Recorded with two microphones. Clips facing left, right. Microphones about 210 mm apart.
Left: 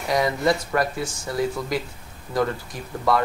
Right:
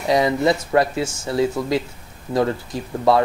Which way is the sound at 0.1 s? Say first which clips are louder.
Right 4 dB; 25° right (ahead or behind).